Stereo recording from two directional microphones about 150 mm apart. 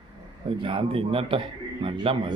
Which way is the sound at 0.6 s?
35° right (ahead or behind).